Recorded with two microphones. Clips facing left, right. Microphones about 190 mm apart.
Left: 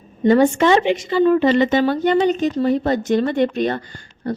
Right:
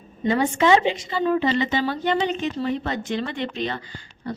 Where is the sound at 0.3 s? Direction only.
45° left (ahead or behind).